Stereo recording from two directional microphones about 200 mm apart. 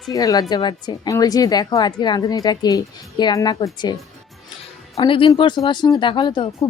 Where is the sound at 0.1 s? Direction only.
15° left (ahead or behind).